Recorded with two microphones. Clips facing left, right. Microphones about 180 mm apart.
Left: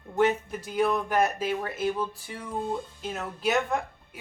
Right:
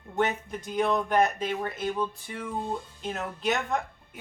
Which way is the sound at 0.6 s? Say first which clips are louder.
Even; 5° left (ahead or behind).